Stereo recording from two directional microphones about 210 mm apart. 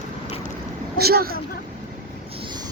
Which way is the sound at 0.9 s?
45° right (ahead or behind).